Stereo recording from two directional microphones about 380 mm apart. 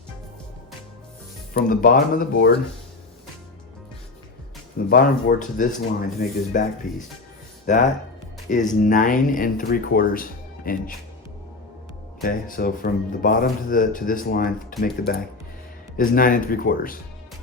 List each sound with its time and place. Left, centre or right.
1.5 s speech: left
4.9 s speech: left
7.7 s speech: centre
12.2 s speech: left
16.0 s speech: left